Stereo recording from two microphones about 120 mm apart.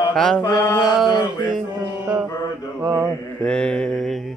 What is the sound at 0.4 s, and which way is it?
Mantra, 30° left (ahead or behind).